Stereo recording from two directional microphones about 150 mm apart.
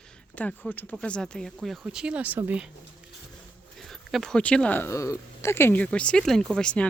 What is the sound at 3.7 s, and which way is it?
Speech, centre (ahead or behind).